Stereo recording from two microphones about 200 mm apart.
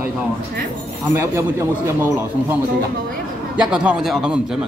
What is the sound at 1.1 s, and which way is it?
A man's voice, 15° right (ahead or behind).